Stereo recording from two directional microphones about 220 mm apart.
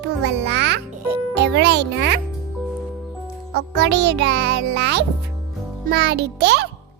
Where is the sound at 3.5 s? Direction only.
50° right (ahead or behind).